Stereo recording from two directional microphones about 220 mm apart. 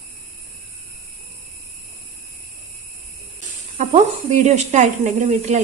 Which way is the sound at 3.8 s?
30° right (ahead or behind).